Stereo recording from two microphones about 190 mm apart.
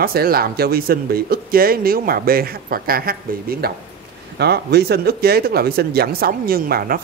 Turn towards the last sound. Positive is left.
turn(degrees=-50)  # may be behind; listen again after turning